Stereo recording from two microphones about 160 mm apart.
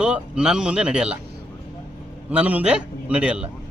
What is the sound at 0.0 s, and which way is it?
A man's voice, 5° right (ahead or behind).